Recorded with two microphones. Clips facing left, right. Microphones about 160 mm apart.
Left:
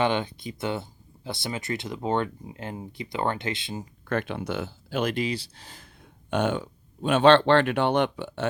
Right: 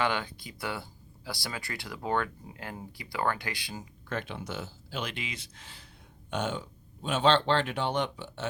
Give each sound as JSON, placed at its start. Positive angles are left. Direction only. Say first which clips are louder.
{"t": 0.0, "sound": "speech", "louder": "left 5 dB", "side_deg": 20}
{"t": 4.1, "sound": "speech", "louder": "left 7 dB", "side_deg": 60}
{"t": 6.3, "sound": "speech", "louder": "left 7 dB", "side_deg": 60}